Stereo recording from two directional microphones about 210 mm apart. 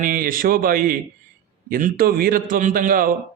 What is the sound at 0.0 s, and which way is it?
A man's voice, 40° right (ahead or behind).